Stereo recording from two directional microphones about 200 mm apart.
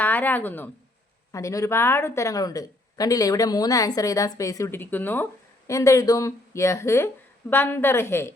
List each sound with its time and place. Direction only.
0.0 s speech: 10° left (ahead or behind)